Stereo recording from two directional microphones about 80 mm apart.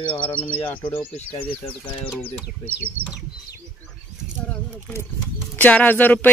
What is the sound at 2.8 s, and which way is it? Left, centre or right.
Speech, right.